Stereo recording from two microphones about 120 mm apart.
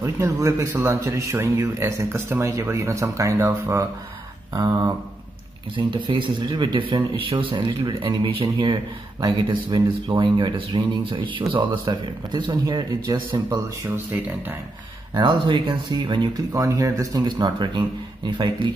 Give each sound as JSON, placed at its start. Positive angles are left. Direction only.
{"t": 0.0, "sound": "speech", "side_deg": -25}
{"t": 4.5, "sound": "speech", "side_deg": -35}
{"t": 13.8, "sound": "speech", "side_deg": -15}
{"t": 15.1, "sound": "speech", "side_deg": -40}
{"t": 16.3, "sound": "speech", "side_deg": -30}